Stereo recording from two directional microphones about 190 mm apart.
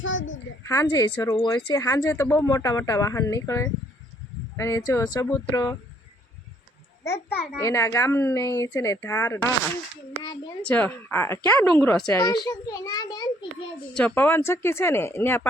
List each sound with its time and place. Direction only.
0.0 s a child's voice: 85° left
0.6 s a child's voice: 15° left (ahead or behind)
7.3 s speech: 15° left (ahead or behind)
10.7 s speech: 10° left (ahead or behind)
11.8 s speech: 5° left (ahead or behind)
12.1 s a child's voice: 20° left (ahead or behind)
13.9 s speech: 10° left (ahead or behind)